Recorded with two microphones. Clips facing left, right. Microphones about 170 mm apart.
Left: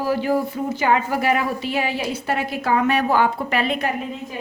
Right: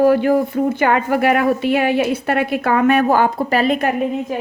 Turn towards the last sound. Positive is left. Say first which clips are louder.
# right 6 dB
turn(degrees=-45)  # may be behind; listen again after turning